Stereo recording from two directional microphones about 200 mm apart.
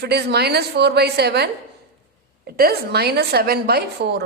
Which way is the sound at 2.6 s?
50° right (ahead or behind).